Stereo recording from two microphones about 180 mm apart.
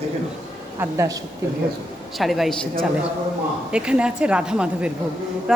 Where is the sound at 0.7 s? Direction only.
15° right (ahead or behind).